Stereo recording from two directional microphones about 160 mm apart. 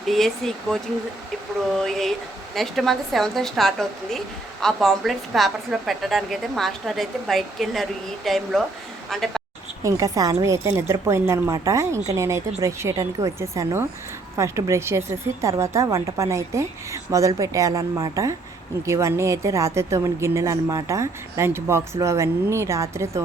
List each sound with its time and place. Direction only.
0.0 s a woman's voice: centre (ahead or behind)
9.8 s a woman's voice: 20° right (ahead or behind)